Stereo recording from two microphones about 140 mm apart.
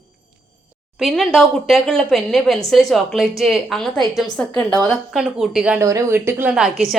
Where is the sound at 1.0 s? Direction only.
Centre (ahead or behind).